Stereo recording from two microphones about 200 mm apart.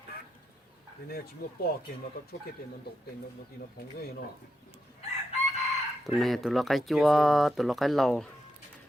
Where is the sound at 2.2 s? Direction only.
50° left (ahead or behind).